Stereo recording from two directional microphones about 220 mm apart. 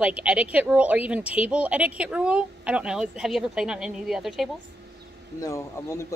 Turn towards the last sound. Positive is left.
turn(degrees=10)  # may be behind; listen again after turning